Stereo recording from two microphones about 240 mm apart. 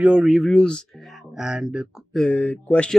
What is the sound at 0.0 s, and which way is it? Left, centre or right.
Speech, centre.